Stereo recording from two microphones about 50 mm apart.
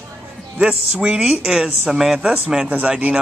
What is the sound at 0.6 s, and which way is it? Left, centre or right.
Speech, centre.